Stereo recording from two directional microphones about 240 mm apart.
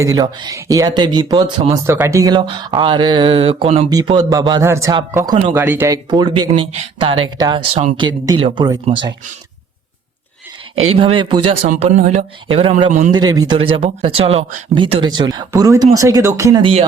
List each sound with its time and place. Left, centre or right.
0.0 s speech: centre
10.9 s speech: right
13.1 s speech: centre